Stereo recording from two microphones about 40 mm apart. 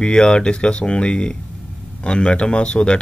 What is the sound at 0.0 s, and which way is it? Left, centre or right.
Speech, left.